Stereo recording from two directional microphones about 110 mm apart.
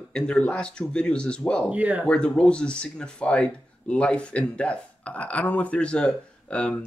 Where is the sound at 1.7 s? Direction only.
15° right (ahead or behind).